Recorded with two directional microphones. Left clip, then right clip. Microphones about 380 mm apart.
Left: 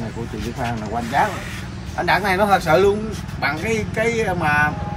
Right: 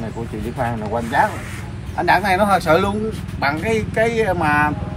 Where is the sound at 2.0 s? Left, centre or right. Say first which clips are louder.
Right 2 dB; centre.